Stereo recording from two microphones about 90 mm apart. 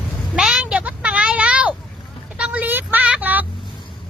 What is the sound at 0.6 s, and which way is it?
Vehicle, 15° right (ahead or behind).